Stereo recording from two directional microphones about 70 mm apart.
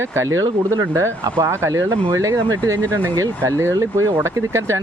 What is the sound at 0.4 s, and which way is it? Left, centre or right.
Speech, right.